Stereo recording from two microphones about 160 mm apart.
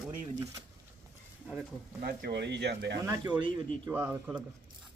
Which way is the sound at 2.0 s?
80° right.